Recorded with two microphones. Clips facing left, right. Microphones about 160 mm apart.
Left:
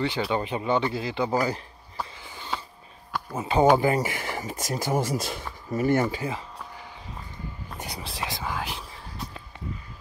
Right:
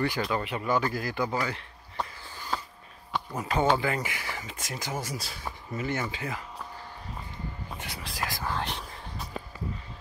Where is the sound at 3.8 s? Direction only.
45° left (ahead or behind).